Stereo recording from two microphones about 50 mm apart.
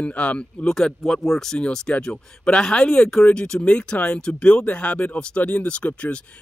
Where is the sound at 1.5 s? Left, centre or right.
Centre.